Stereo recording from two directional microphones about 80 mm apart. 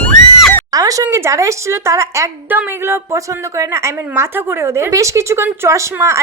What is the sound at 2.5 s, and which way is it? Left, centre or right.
A woman's voice, right.